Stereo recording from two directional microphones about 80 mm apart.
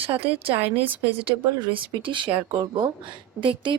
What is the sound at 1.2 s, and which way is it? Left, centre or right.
Speech, right.